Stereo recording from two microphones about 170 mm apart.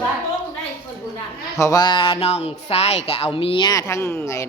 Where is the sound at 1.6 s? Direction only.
20° left (ahead or behind).